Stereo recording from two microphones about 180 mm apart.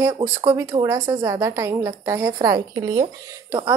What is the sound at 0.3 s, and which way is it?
A woman's voice, 15° right (ahead or behind).